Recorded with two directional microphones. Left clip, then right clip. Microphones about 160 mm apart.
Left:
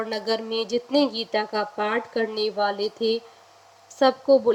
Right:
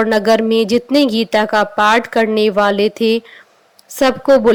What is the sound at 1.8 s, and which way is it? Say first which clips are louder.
Speech: right 13 dB; 25° right (ahead or behind).